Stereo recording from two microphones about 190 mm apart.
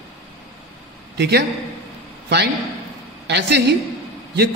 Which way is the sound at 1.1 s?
60° right (ahead or behind).